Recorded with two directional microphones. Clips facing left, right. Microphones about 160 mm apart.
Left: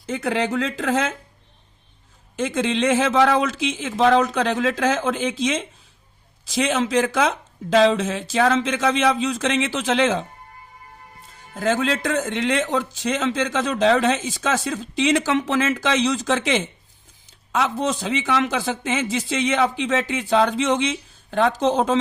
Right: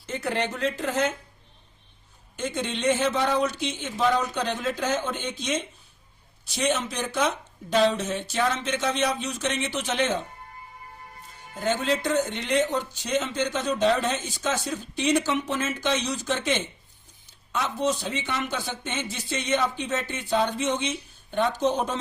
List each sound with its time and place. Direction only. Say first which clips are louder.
0.1 s a man's voice: left 6 dB; 90° left
2.3 s a man's voice: left 7 dB; 90° left
11.5 s a man's voice: left 4 dB; 90° left